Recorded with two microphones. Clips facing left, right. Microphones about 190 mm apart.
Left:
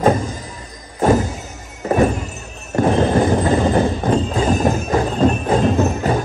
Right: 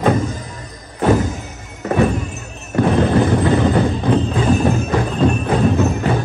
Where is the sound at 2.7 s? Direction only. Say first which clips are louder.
Even; 40° left (ahead or behind).